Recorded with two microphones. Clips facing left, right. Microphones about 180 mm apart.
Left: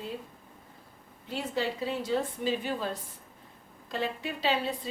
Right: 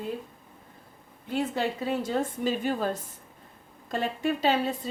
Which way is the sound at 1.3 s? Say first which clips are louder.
Right 4 dB; 50° right (ahead or behind).